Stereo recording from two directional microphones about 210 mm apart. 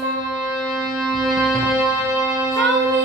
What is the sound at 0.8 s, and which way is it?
Music, centre (ahead or behind).